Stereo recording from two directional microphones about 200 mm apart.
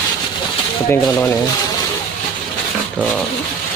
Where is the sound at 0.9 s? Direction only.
10° left (ahead or behind).